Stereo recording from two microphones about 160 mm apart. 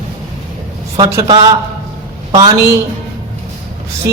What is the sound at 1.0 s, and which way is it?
A man's voice, 25° right (ahead or behind).